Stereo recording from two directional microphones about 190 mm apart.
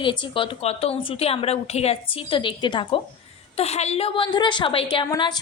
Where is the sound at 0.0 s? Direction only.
25° left (ahead or behind).